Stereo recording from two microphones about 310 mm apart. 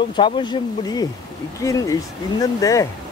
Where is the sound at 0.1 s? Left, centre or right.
Centre.